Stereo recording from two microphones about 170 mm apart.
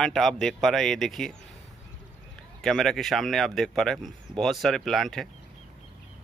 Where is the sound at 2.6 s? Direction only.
Centre (ahead or behind).